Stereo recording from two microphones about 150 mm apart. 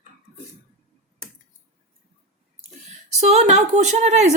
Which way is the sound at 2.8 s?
45° right (ahead or behind).